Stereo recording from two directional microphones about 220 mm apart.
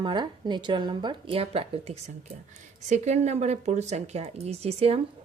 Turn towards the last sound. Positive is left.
turn(degrees=-25)  # may be behind; listen again after turning